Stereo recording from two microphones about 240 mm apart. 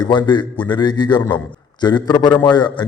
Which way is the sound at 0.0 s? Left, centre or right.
Centre.